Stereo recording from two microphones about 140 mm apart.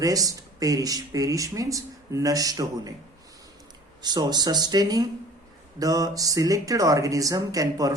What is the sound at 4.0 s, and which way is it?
Speech, 30° right (ahead or behind).